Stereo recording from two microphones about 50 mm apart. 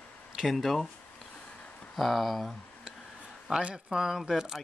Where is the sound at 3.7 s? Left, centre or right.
Centre.